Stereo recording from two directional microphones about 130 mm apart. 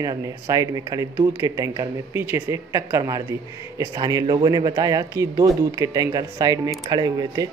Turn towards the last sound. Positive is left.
turn(degrees=-30)  # may be behind; listen again after turning